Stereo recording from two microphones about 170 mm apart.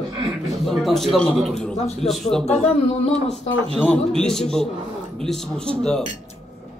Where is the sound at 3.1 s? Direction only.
40° left (ahead or behind).